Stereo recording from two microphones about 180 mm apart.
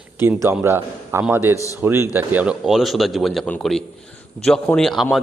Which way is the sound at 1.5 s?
15° left (ahead or behind).